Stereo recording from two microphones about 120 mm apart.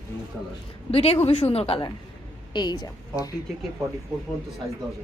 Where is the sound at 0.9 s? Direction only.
55° left (ahead or behind).